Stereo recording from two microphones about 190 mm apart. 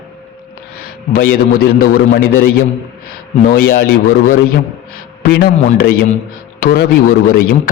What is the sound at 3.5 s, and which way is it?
Speech, 55° left (ahead or behind).